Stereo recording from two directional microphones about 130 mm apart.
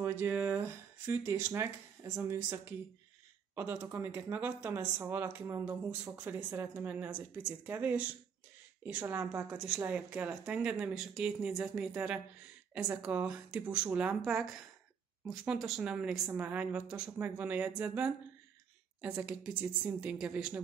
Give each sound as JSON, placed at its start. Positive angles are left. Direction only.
{"t": 0.0, "sound": "speech", "side_deg": -20}
{"t": 12.7, "sound": "speech", "side_deg": -10}